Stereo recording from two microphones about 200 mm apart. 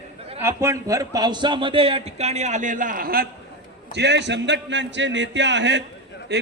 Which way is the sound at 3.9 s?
60° right (ahead or behind).